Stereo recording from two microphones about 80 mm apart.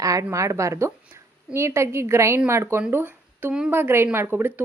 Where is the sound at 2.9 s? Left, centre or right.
Right.